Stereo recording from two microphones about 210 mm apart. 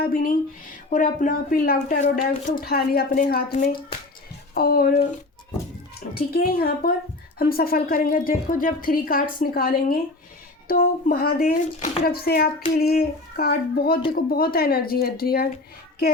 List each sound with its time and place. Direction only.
0.0 s a woman's voice: 40° left (ahead or behind)
6.1 s a woman's voice: 45° left (ahead or behind)